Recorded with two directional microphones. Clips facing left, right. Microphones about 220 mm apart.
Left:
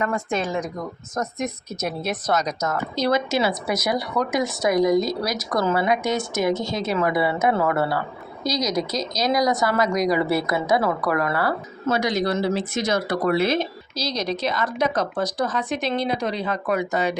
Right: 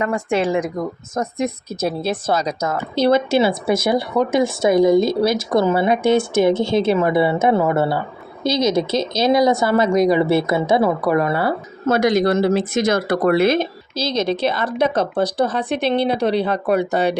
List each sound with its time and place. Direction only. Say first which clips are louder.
0.3 s speech: right 6 dB; 30° right (ahead or behind)
11.9 s speech: right 6 dB; 50° right (ahead or behind)
13.9 s speech: right 6 dB; 25° right (ahead or behind)